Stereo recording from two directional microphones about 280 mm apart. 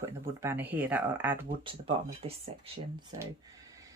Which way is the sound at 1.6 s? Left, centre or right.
Centre.